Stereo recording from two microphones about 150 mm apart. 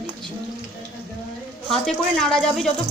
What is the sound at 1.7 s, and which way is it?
A woman's voice, 5° left (ahead or behind).